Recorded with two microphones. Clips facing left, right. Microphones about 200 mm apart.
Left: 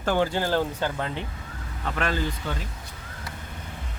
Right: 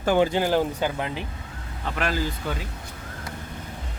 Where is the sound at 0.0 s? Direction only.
15° right (ahead or behind).